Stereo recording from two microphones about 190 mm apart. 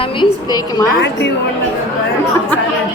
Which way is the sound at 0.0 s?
25° left (ahead or behind).